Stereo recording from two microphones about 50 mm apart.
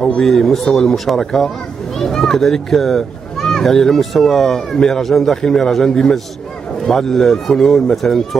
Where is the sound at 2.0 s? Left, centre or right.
Centre.